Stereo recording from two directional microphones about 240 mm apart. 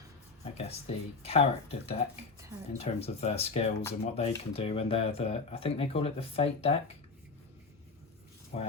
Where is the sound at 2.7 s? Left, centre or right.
Left.